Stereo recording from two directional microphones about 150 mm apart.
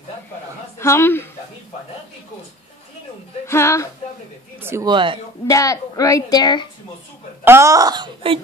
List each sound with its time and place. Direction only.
0.7 s speech: 15° left (ahead or behind)
3.4 s speech: 20° left (ahead or behind)
4.6 s speech: 15° right (ahead or behind)
4.8 s speech: 35° right (ahead or behind)
5.5 s a woman's voice: 20° left (ahead or behind)
7.4 s speech: 20° right (ahead or behind)